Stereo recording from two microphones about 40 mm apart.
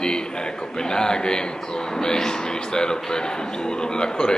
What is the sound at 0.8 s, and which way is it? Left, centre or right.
Speech, centre.